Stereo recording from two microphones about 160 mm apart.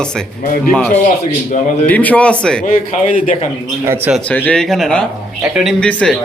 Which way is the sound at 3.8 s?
15° right (ahead or behind).